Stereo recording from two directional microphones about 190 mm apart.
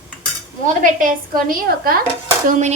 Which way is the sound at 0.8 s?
45° right (ahead or behind).